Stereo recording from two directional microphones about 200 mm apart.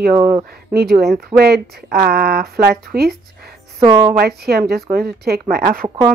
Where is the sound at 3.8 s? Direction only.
20° right (ahead or behind).